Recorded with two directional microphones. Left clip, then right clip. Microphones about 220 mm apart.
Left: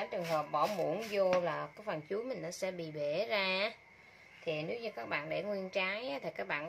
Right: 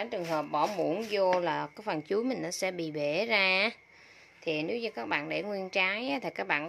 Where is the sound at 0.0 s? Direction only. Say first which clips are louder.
Right 3 dB; 55° right (ahead or behind).